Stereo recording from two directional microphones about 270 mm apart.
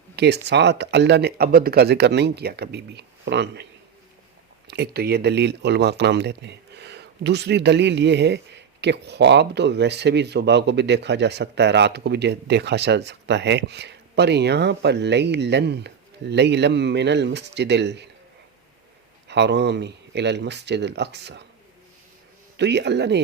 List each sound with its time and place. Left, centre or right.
0.2 s speech: right
4.7 s speech: right
19.3 s speech: right
22.5 s speech: right